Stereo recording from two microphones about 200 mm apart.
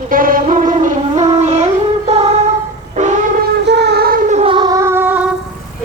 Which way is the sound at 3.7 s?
55° right (ahead or behind).